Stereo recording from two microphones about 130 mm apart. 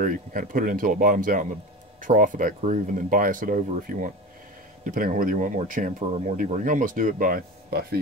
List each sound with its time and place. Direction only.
0.0 s speech: 90° right